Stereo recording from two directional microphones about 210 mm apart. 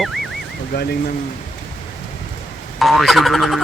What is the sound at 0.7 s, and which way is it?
Speech, 45° left (ahead or behind).